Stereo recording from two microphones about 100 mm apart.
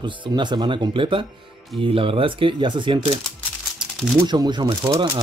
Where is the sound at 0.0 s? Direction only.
50° right (ahead or behind).